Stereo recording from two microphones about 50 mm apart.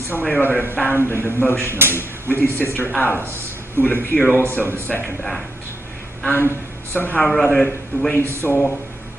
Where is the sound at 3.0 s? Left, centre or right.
Right.